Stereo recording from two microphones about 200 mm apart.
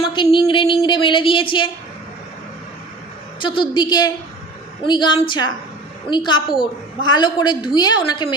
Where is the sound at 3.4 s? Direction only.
25° left (ahead or behind).